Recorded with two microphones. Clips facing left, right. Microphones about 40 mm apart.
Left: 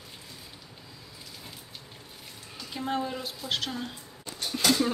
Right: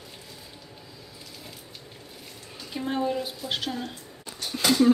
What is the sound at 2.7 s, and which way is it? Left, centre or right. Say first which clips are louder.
Speech: right 4 dB; centre.